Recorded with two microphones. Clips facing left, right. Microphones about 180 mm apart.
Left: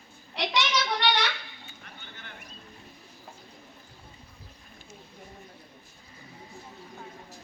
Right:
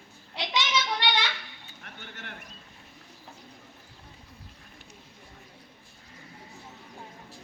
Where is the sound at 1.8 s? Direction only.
70° right (ahead or behind).